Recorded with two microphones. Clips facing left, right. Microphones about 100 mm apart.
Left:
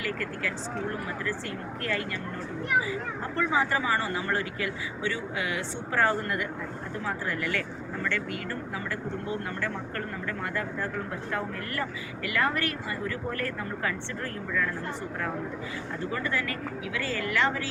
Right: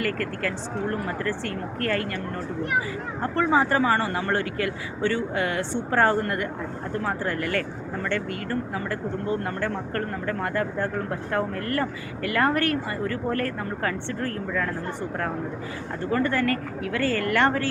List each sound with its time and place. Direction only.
0.0 s speech: 55° right (ahead or behind)
1.8 s a woman's voice: 55° right (ahead or behind)
3.3 s a woman's voice: 45° right (ahead or behind)
5.9 s a woman's voice: 40° right (ahead or behind)
16.1 s a woman's voice: 50° right (ahead or behind)